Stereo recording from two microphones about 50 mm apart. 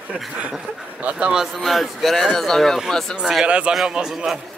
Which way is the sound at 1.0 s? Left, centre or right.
Right.